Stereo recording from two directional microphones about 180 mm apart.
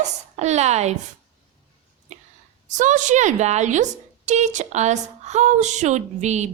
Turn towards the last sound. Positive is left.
turn(degrees=-40)  # may be behind; listen again after turning